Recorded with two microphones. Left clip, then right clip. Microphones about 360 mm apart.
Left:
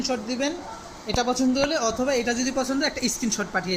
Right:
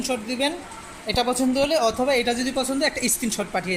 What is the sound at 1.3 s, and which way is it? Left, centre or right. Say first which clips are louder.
Speech: right 2 dB; centre.